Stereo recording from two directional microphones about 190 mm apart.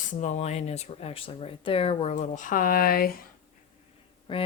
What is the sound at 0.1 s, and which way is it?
Speech, 35° left (ahead or behind).